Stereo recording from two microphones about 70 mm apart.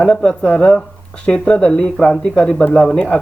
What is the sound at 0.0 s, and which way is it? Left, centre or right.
Speech, centre.